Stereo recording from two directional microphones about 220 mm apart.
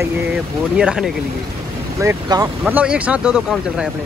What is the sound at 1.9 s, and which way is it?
Speech, 15° right (ahead or behind).